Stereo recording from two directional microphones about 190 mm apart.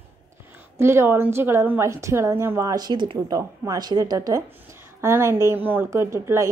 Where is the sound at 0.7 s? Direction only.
15° right (ahead or behind).